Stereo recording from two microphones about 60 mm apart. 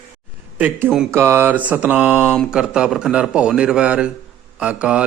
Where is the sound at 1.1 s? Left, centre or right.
Right.